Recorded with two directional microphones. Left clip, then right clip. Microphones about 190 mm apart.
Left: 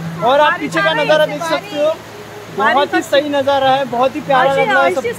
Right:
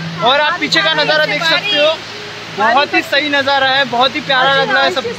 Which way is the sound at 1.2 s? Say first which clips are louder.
Right 3 dB; 20° right (ahead or behind).